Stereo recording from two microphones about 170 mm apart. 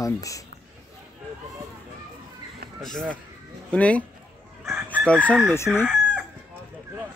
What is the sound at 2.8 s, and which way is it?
Speech, 5° left (ahead or behind).